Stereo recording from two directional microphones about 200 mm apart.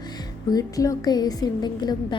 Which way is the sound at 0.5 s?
15° left (ahead or behind).